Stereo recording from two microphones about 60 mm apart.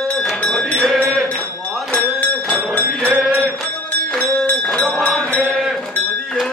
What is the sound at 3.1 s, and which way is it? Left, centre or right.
Mantra, right.